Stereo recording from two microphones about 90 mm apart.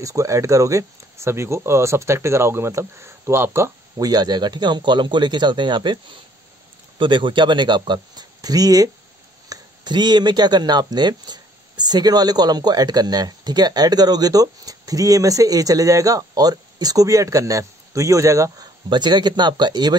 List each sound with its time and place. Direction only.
0.0 s speech: 35° right (ahead or behind)
4.0 s speech: 50° right (ahead or behind)
18.9 s speech: 55° right (ahead or behind)